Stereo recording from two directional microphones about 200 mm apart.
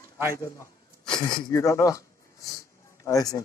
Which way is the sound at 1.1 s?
20° left (ahead or behind).